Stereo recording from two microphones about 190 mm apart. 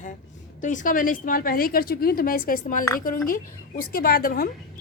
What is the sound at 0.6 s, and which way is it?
Speech, 40° left (ahead or behind).